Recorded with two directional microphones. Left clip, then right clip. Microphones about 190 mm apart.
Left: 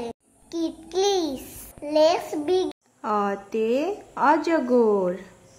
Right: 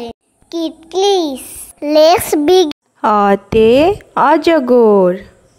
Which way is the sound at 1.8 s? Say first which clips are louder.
Right 11 dB; 60° right (ahead or behind).